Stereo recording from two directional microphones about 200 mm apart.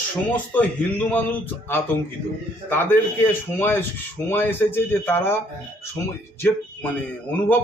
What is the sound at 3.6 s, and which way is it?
Speech, 10° left (ahead or behind).